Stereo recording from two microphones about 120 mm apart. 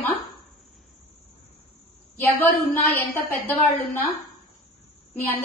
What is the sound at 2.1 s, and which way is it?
A woman's voice, 15° left (ahead or behind).